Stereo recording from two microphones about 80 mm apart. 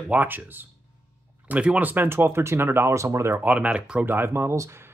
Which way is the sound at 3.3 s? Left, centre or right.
Centre.